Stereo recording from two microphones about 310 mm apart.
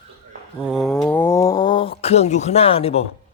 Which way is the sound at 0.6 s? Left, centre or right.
Centre.